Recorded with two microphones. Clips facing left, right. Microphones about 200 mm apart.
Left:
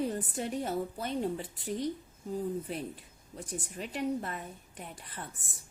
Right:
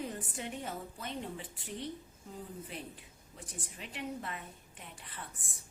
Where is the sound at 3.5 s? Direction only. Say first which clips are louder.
Left 8 dB; 45° left (ahead or behind).